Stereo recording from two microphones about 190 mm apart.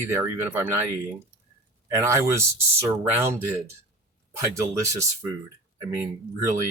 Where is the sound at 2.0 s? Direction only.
15° right (ahead or behind).